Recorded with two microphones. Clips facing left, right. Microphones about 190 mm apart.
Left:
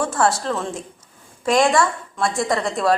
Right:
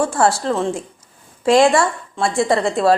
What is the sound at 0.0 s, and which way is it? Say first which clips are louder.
A woman's voice: right 3 dB; 30° right (ahead or behind).